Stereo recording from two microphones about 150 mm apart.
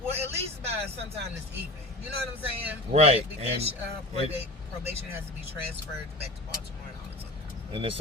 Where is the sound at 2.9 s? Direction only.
45° right (ahead or behind).